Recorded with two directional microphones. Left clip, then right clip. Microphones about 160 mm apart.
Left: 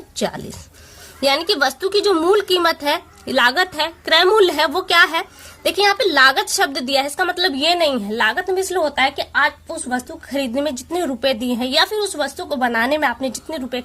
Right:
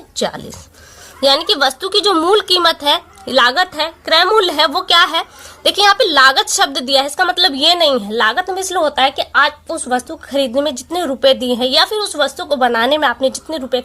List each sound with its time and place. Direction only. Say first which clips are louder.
0.2 s a woman's voice: right 4 dB; 20° left (ahead or behind)